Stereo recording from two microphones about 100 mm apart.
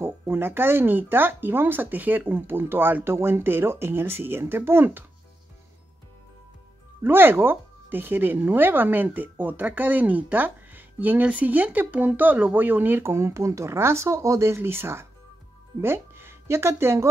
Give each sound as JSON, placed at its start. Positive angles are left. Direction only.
{"t": 0.0, "sound": "speech", "side_deg": -25}
{"t": 7.0, "sound": "speech", "side_deg": -20}